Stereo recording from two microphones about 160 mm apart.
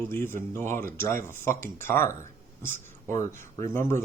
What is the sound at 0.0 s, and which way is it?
A man's voice, 15° left (ahead or behind).